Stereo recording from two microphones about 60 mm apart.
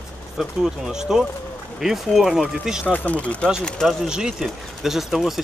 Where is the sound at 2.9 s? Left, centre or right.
Left.